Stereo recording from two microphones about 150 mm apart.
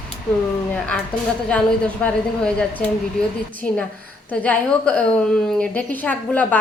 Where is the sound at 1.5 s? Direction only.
10° left (ahead or behind).